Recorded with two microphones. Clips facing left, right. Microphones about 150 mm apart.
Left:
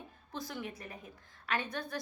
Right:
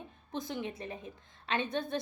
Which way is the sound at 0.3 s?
20° right (ahead or behind).